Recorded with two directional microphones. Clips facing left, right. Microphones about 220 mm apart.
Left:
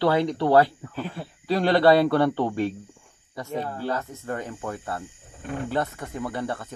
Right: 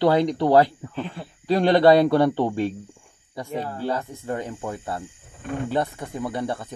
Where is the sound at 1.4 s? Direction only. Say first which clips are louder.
Right 3 dB; 20° right (ahead or behind).